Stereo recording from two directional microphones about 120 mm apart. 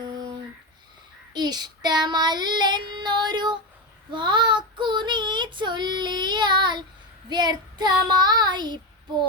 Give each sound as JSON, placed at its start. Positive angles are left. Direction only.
{"t": 1.3, "sound": "child singing", "side_deg": -35}